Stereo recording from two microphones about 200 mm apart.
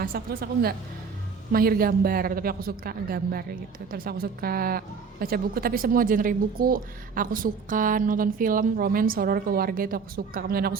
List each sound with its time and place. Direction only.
0.0 s speech: 45° right (ahead or behind)